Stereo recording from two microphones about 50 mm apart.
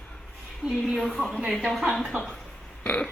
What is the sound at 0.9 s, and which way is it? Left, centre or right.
A woman's voice, centre.